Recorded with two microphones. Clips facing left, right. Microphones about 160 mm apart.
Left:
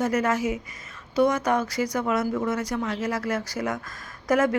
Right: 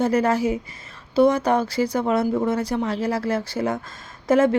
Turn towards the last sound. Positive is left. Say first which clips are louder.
# right 4 dB
turn(degrees=-25)  # may be behind; listen again after turning